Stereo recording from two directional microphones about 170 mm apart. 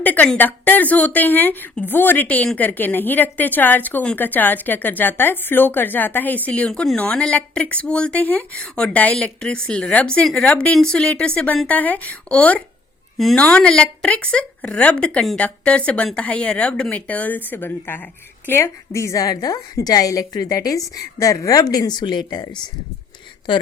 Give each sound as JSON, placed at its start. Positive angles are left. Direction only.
{"t": 0.0, "sound": "a woman's voice", "side_deg": 10}